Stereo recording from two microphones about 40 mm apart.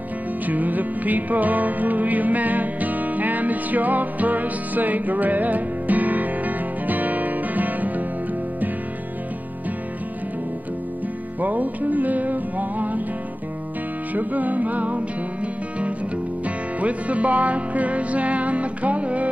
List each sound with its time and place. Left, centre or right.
0.5 s music: right
11.4 s music: right
14.1 s music: right
16.4 s music: right